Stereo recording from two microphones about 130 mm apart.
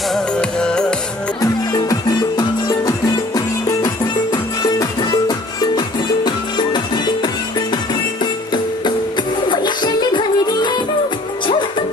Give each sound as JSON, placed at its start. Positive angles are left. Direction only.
{"t": 0.1, "sound": "music", "side_deg": 5}
{"t": 1.4, "sound": "music", "side_deg": 25}
{"t": 9.5, "sound": "music", "side_deg": 35}